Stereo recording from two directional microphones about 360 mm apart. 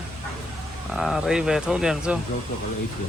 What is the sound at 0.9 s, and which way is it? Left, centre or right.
Speech, centre.